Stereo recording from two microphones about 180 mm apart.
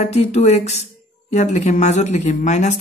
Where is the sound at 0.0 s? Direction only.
40° left (ahead or behind).